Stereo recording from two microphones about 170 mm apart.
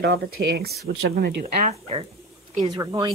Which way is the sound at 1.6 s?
40° right (ahead or behind).